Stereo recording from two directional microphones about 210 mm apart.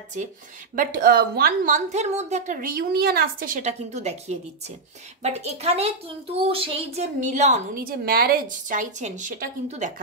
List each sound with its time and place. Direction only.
0.7 s a woman's voice: 45° right (ahead or behind)